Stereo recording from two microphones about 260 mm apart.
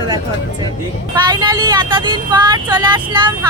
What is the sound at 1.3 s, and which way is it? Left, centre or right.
Speech, centre.